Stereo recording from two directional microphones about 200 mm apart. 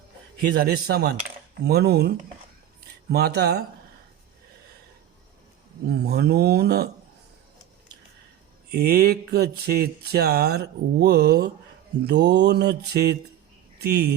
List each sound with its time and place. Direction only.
0.4 s speech: 50° right (ahead or behind)
5.8 s speech: 55° right (ahead or behind)
8.7 s speech: 50° right (ahead or behind)
12.0 s mantra: 55° right (ahead or behind)
13.7 s speech: 55° right (ahead or behind)